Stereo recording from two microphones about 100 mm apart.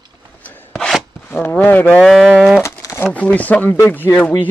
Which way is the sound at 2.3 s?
5° left (ahead or behind).